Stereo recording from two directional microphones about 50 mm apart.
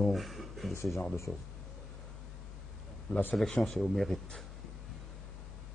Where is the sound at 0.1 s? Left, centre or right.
Centre.